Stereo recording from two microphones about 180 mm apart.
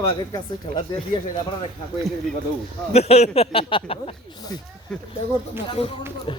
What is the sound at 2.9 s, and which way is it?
Speech, 35° left (ahead or behind).